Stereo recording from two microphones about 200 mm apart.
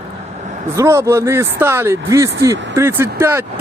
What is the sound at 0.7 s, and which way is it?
Speech, 15° right (ahead or behind).